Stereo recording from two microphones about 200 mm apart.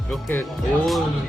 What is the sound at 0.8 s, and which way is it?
Speech, centre (ahead or behind).